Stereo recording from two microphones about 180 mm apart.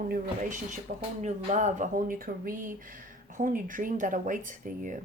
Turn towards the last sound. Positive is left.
turn(degrees=-45)  # may be behind; listen again after turning